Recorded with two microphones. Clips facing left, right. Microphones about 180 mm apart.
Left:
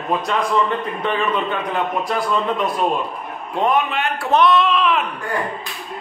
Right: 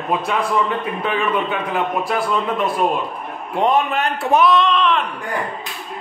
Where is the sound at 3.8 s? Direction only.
40° right (ahead or behind).